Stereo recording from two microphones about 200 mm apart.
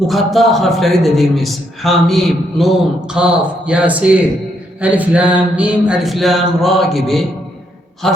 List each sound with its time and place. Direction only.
0.1 s a man's voice: centre (ahead or behind)